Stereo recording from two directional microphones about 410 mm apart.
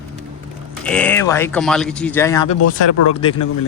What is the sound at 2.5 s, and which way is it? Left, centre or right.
Speech, left.